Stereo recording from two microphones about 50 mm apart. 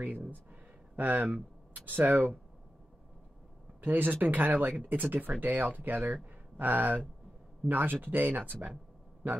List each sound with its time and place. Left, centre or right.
0.9 s speech: right
3.8 s speech: right